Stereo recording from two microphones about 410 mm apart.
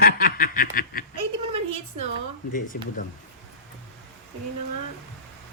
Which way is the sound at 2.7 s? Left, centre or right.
Left.